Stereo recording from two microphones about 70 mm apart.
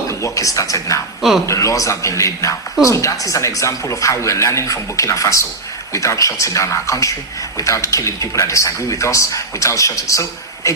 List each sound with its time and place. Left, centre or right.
0.2 s speech: left